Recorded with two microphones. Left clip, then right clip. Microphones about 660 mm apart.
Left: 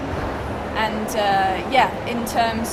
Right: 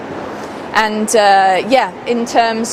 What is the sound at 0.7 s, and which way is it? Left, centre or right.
Speech, right.